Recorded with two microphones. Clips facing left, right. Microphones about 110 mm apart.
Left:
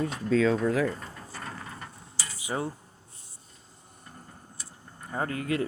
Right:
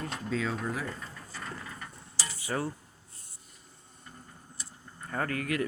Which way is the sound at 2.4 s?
20° left (ahead or behind).